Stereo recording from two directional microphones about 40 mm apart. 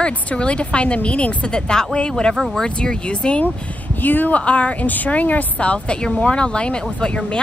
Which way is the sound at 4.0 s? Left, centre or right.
Left.